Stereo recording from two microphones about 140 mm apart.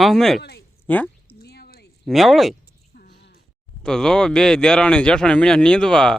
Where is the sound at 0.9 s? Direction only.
10° left (ahead or behind).